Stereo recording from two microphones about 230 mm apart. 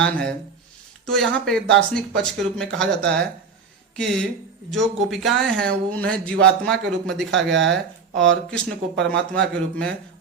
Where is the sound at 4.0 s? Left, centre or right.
Centre.